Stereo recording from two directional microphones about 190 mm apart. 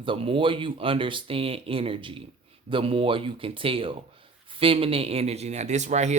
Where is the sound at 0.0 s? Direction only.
25° right (ahead or behind).